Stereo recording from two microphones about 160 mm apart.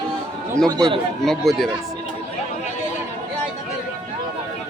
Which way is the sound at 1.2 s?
5° left (ahead or behind).